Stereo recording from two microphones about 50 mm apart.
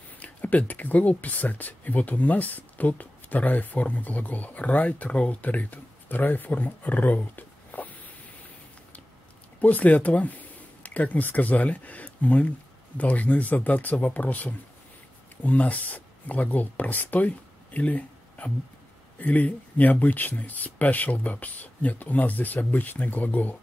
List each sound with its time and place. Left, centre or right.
0.2 s speech: left
9.6 s speech: left